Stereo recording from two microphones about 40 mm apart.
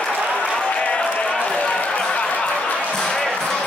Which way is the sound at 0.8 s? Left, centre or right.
Left.